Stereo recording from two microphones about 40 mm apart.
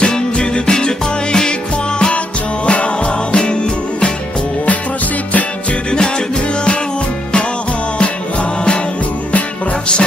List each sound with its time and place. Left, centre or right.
0.0 s music: left
5.9 s music: left